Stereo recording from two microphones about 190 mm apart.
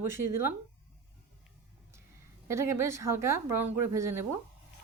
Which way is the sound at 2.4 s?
15° right (ahead or behind).